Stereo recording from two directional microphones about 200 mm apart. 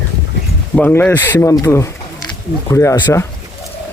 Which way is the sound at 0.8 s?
5° left (ahead or behind).